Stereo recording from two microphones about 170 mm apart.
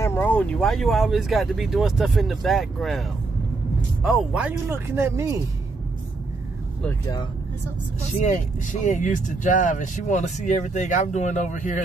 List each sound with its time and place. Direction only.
0.0 s speech: 10° left (ahead or behind); by 5.4 s 20° right (ahead or behind)
8.8 s speech: 50° left (ahead or behind)